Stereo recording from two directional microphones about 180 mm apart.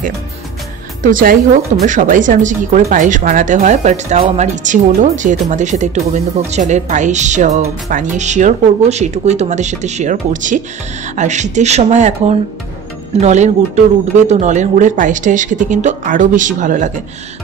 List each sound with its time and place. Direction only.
1.0 s speech: 50° right (ahead or behind)